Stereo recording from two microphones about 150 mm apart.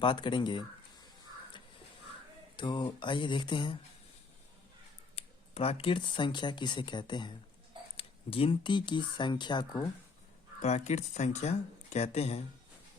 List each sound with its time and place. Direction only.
0.0 s speech: 30° left (ahead or behind)
2.6 s speech: 30° left (ahead or behind)
5.1 s speech: 40° left (ahead or behind)
10.6 s speech: 50° left (ahead or behind)